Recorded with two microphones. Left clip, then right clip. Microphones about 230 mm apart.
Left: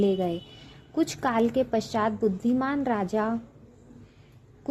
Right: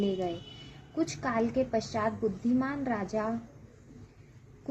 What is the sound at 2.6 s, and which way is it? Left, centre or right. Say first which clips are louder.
Speech: left 6 dB; left.